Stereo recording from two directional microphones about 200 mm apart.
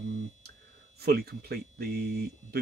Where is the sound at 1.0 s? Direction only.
50° right (ahead or behind).